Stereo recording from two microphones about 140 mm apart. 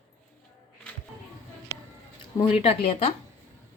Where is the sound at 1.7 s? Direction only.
20° left (ahead or behind).